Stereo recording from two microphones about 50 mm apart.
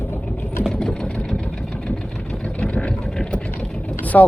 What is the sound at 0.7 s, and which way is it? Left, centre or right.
Sewing machine, centre.